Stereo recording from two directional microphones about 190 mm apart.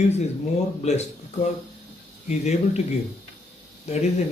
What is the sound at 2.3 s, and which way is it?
Speech, 35° left (ahead or behind).